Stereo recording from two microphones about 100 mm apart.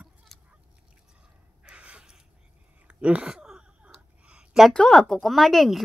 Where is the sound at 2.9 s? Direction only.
10° right (ahead or behind).